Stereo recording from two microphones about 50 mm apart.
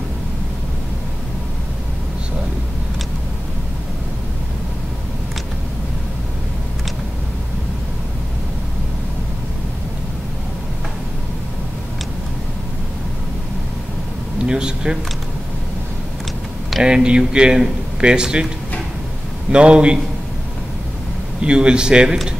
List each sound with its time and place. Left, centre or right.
14.4 s a sound: centre
16.8 s a man's voice: centre
19.5 s a man's voice: right
21.4 s a man's voice: centre